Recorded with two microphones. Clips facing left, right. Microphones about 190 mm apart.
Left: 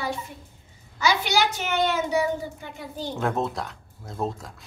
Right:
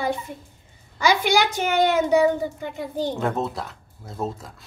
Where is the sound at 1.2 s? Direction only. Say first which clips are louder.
Right 4 dB; 50° right (ahead or behind).